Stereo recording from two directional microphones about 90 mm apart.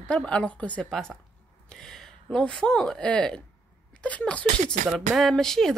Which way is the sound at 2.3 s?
10° left (ahead or behind).